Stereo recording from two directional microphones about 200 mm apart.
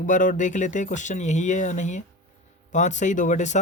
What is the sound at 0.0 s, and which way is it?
Speech, 40° left (ahead or behind).